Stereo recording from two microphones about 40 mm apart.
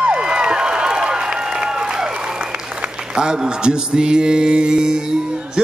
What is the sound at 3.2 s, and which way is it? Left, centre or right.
Mantra, right.